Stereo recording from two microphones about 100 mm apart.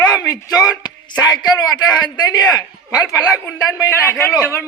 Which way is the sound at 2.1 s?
40° left (ahead or behind).